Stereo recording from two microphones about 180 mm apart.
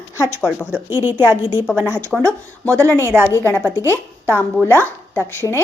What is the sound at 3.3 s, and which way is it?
A woman's voice, 15° left (ahead or behind).